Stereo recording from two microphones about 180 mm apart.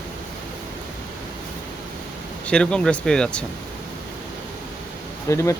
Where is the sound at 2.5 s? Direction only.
5° left (ahead or behind).